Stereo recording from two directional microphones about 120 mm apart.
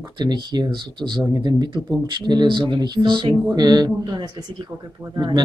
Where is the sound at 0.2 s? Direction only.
40° right (ahead or behind).